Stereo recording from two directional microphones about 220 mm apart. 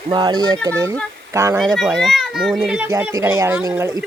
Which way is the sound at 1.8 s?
Centre (ahead or behind).